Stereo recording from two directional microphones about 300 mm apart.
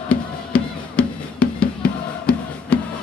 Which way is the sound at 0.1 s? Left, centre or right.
Centre.